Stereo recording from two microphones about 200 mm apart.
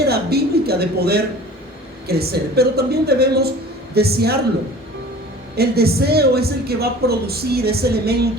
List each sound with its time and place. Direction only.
0.0 s a woman's voice: 50° right (ahead or behind)
5.5 s a woman's voice: 50° right (ahead or behind)